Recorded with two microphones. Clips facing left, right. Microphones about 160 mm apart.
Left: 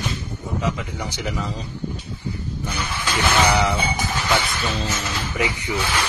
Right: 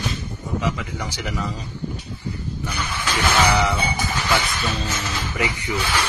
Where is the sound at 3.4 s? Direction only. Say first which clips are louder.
Even; 20° left (ahead or behind).